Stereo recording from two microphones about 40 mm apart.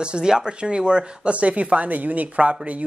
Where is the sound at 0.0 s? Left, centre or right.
Right.